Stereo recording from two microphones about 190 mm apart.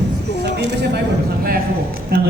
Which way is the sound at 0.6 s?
60° right (ahead or behind).